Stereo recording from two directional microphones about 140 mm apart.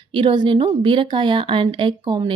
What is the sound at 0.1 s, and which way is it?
Speech, 35° right (ahead or behind).